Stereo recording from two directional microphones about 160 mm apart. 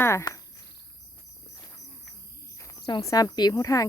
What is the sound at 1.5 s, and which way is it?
Cricket, 25° left (ahead or behind).